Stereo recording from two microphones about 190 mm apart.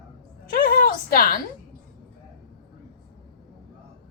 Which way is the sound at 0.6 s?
50° left (ahead or behind).